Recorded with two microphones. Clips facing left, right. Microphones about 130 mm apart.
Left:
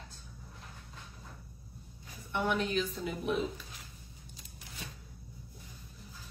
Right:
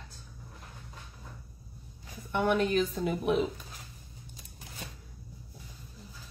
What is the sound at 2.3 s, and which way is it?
A woman's voice, 50° right (ahead or behind).